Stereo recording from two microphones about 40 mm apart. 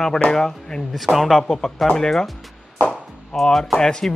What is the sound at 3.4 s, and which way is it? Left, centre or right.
Speech, centre.